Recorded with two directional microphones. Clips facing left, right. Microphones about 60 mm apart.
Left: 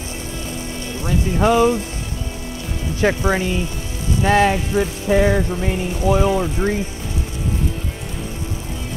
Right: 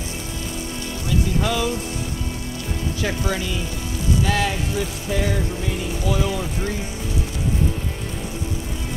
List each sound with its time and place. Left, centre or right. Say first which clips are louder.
1.0 s speech: left 5 dB; left
3.0 s music: left 8 dB; left